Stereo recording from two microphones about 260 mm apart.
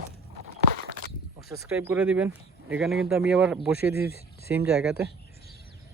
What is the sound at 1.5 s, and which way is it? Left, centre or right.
Speech, centre.